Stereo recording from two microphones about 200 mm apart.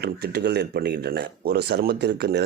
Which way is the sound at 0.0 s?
55° right (ahead or behind).